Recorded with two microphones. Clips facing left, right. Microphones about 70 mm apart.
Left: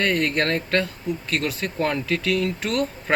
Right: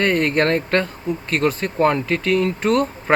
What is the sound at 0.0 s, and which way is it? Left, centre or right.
Speech, right.